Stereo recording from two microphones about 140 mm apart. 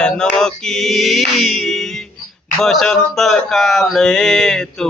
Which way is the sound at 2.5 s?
5° left (ahead or behind).